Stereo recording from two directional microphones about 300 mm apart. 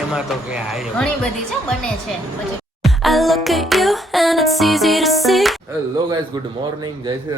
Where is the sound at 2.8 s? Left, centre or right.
Centre.